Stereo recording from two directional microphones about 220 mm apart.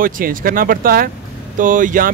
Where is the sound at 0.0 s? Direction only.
40° right (ahead or behind).